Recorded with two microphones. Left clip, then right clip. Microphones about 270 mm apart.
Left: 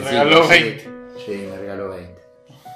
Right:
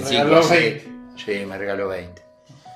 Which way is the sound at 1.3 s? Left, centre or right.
Right.